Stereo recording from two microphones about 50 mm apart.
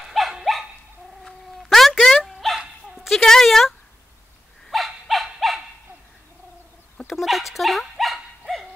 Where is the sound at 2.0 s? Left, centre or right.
Centre.